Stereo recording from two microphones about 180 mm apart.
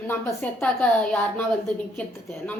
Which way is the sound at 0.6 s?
10° left (ahead or behind).